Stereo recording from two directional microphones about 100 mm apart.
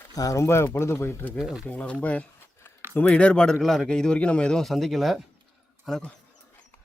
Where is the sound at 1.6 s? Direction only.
15° left (ahead or behind).